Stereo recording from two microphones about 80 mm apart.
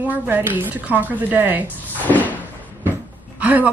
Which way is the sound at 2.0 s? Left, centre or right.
Left.